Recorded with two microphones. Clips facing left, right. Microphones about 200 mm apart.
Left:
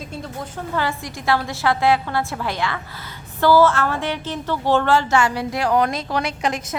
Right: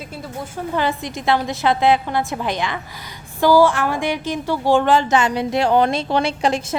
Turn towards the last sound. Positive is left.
turn(degrees=-30)  # may be behind; listen again after turning